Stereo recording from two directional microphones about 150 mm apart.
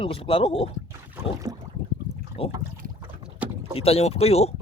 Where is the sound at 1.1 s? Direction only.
20° right (ahead or behind).